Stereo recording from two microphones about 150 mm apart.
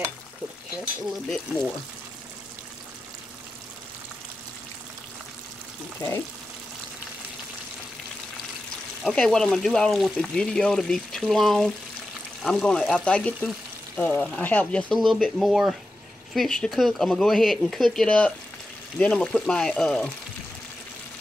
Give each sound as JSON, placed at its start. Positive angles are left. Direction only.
{"t": 6.0, "sound": "speech", "side_deg": 25}
{"t": 9.0, "sound": "speech", "side_deg": 5}